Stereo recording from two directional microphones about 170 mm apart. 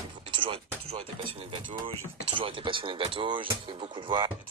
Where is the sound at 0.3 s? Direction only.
30° right (ahead or behind).